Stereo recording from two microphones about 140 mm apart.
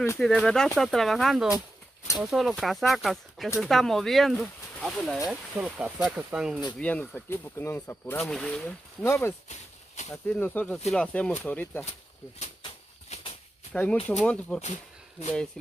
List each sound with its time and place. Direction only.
0.2 s speech: 5° left (ahead or behind)
6.8 s speech: 10° left (ahead or behind)
8.3 s speech: 5° left (ahead or behind)
9.0 s speech: 20° left (ahead or behind)
9.5 s a sound: 55° left (ahead or behind)
10.2 s speech: 10° left (ahead or behind)
12.6 s a sound: 40° left (ahead or behind)
14.2 s speech: 10° left (ahead or behind)
14.6 s speech: 55° left (ahead or behind)